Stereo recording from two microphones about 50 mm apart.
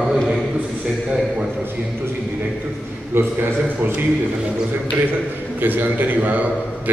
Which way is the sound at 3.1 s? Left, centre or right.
Right.